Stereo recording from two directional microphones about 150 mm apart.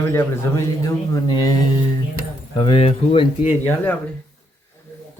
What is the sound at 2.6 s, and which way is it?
Speech, 35° left (ahead or behind).